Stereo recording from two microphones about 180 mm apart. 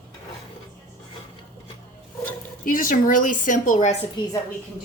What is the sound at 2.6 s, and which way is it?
Speech, 50° left (ahead or behind).